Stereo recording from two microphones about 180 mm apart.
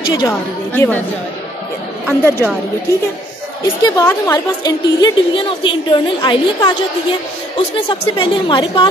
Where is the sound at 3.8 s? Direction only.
15° left (ahead or behind).